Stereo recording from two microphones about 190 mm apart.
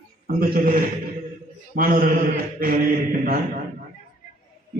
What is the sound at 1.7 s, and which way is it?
A man's voice, 50° right (ahead or behind).